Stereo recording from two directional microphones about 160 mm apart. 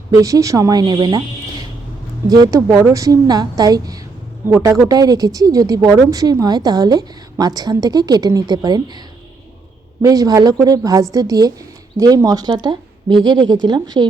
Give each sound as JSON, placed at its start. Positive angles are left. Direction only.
{"t": 0.1, "sound": "a woman's voice", "side_deg": -20}
{"t": 2.3, "sound": "a woman's voice", "side_deg": -20}